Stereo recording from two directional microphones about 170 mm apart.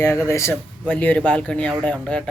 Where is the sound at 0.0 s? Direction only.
20° left (ahead or behind).